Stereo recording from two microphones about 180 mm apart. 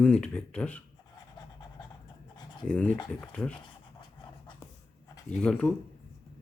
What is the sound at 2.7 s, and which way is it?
Speech, 10° left (ahead or behind).